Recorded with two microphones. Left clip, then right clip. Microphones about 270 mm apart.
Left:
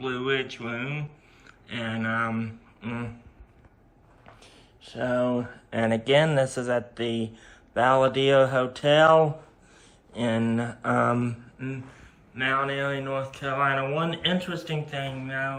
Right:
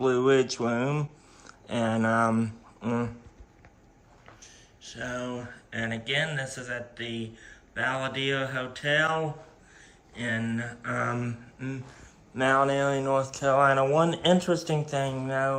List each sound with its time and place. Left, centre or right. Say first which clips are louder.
0.0 s speech: right 5 dB; centre
4.4 s speech: even; centre
12.3 s speech: right 2 dB; centre